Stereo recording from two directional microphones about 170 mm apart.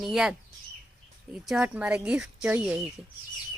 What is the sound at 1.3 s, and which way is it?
A woman's voice, 5° right (ahead or behind).